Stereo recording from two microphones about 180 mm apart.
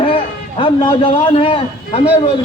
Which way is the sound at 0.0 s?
30° left (ahead or behind).